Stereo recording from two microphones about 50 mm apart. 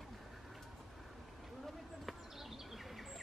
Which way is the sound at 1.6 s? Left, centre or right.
Centre.